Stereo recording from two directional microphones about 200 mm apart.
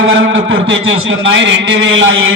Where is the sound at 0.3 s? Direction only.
75° right (ahead or behind).